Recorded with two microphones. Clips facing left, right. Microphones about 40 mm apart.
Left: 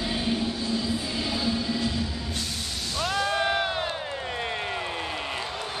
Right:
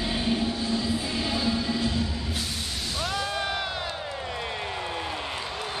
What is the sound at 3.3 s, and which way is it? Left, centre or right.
Crowd, left.